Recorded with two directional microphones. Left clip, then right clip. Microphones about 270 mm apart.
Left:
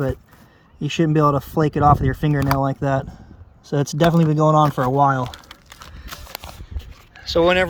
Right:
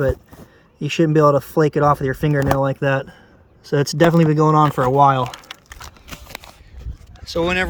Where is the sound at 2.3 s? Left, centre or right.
Right.